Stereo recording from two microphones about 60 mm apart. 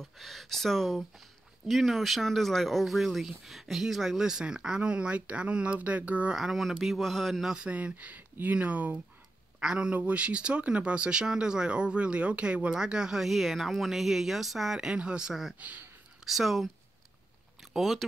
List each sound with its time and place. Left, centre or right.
0.0 s speech: centre; by 6.3 s right
6.3 s speech: centre
7.5 s speech: right; by 16.7 s centre
17.7 s speech: centre